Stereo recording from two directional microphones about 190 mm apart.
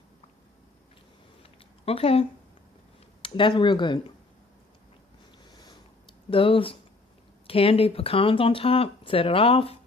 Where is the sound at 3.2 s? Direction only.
25° left (ahead or behind).